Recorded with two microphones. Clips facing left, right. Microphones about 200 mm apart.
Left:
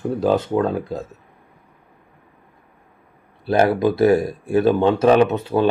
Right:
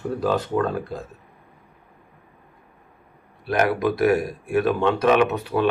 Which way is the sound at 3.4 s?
30° left (ahead or behind).